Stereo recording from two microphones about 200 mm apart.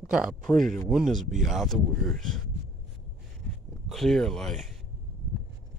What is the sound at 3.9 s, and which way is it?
Speech, centre (ahead or behind).